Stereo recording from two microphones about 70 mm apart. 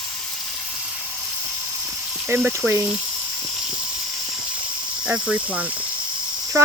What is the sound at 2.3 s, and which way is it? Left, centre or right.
Cricket, right.